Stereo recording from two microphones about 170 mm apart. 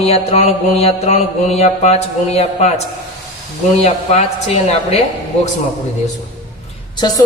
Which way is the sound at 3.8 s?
40° left (ahead or behind).